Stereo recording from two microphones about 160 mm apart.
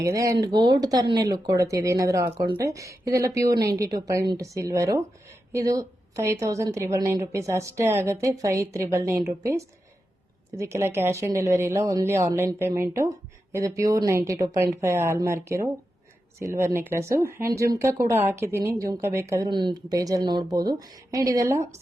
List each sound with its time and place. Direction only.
0.0 s a woman's voice: 20° right (ahead or behind)